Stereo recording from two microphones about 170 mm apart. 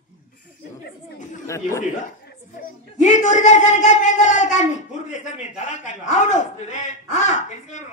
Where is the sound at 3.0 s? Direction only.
45° left (ahead or behind).